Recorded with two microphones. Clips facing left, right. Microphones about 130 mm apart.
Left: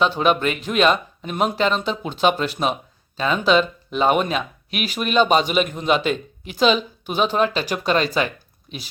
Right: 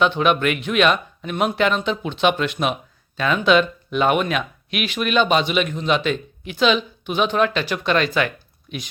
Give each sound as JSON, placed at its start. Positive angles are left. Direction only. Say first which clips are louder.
{"t": 0.0, "sound": "speech", "louder": "right 1 dB", "side_deg": 35}